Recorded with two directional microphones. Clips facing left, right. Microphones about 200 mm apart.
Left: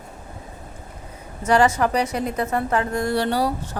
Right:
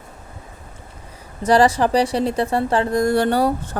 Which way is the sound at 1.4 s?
35° right (ahead or behind).